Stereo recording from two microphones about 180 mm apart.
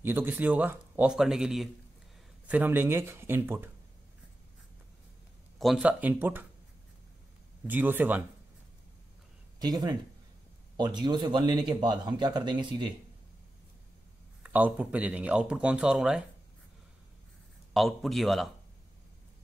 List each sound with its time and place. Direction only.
0.0 s speech: 10° right (ahead or behind)
5.6 s speech: 5° right (ahead or behind)
7.6 s speech: 10° right (ahead or behind)
9.6 s speech: 25° right (ahead or behind)
14.4 s speech: 10° right (ahead or behind)
17.7 s a man's voice: centre (ahead or behind)